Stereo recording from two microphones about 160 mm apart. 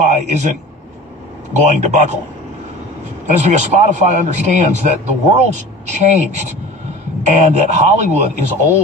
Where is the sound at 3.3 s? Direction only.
45° right (ahead or behind).